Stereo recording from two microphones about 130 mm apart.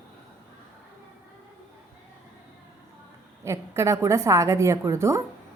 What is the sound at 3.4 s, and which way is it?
A woman's voice, 20° right (ahead or behind).